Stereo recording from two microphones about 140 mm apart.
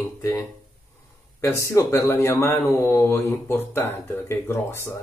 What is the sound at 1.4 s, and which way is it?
Speech, 20° left (ahead or behind).